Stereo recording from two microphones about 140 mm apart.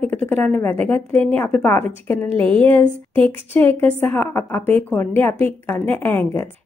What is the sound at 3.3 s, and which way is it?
A woman's voice, 15° left (ahead or behind).